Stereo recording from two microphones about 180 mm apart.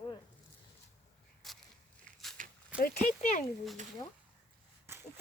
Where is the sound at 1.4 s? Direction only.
Centre (ahead or behind).